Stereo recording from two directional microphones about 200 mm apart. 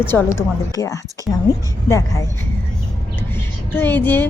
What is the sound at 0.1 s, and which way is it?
A woman's voice, 10° left (ahead or behind).